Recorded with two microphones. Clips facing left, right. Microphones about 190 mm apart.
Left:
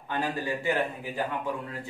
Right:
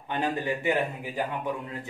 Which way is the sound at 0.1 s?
20° right (ahead or behind).